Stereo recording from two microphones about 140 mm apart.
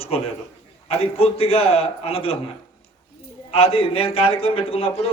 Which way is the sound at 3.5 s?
45° left (ahead or behind).